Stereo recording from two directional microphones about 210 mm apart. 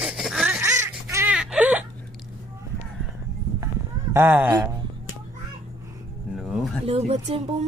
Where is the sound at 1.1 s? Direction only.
15° right (ahead or behind).